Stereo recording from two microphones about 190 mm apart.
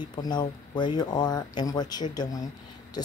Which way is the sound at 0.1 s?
20° left (ahead or behind).